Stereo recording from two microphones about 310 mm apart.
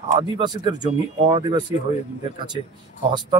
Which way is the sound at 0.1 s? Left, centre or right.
Centre.